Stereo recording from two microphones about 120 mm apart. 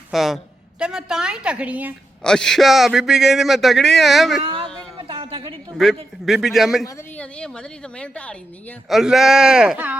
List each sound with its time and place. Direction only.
0.1 s a man's voice: centre (ahead or behind)
2.2 s a man's voice: 5° left (ahead or behind)
4.4 s a sound: 45° right (ahead or behind)
5.7 s a man's voice: centre (ahead or behind)
8.9 s a man's voice: centre (ahead or behind)